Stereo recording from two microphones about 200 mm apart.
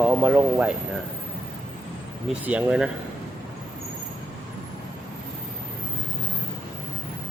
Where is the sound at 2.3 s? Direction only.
5° right (ahead or behind).